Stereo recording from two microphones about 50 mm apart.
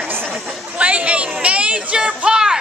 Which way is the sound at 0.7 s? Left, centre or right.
Right.